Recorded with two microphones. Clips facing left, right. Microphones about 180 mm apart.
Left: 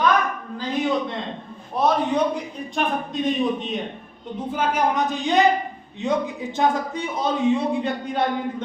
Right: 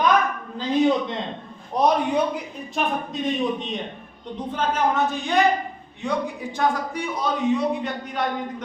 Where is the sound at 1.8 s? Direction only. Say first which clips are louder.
Even; 15° right (ahead or behind).